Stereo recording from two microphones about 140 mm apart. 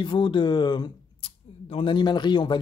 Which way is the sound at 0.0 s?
35° left (ahead or behind).